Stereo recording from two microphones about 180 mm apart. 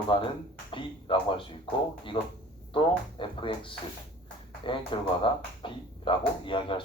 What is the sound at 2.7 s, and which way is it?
Speech, 30° left (ahead or behind).